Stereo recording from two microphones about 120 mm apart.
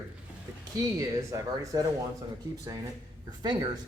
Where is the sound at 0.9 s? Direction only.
30° right (ahead or behind).